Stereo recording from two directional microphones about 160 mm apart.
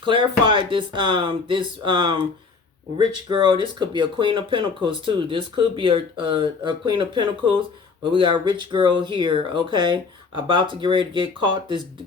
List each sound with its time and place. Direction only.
0.1 s speech: 30° right (ahead or behind)